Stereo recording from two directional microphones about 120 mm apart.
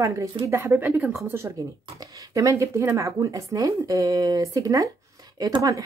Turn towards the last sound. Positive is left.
turn(degrees=-30)  # may be behind; listen again after turning